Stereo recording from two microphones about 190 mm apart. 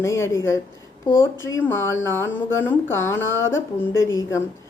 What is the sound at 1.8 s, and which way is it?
Speech, 90° left.